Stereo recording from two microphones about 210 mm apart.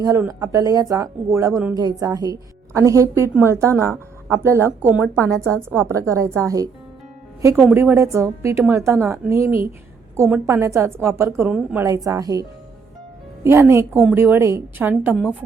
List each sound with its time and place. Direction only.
0.0 s a woman's voice: 15° right (ahead or behind)
7.5 s a woman's voice: centre (ahead or behind)
7.8 s a woman's voice: 15° right (ahead or behind)